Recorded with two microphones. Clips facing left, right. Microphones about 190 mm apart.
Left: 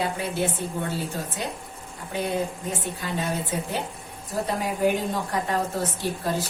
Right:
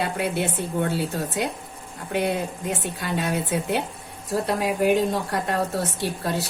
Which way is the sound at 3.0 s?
65° right (ahead or behind).